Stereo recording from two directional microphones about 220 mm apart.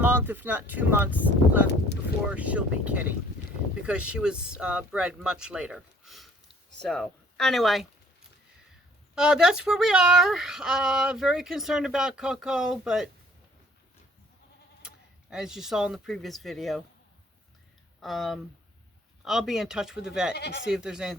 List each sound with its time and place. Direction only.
0.0 s speech: 10° right (ahead or behind)
9.1 s speech: 5° right (ahead or behind)
14.8 s speech: 5° right (ahead or behind)
18.0 s speech: centre (ahead or behind)
20.3 s speech: 50° left (ahead or behind)
20.7 s speech: 5° right (ahead or behind)